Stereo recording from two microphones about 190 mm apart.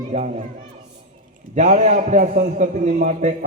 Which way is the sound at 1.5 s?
40° right (ahead or behind).